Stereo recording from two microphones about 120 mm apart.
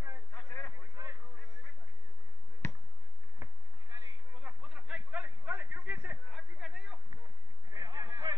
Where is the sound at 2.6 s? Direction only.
25° left (ahead or behind).